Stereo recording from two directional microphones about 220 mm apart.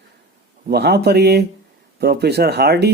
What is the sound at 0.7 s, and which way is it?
Speech, 50° right (ahead or behind).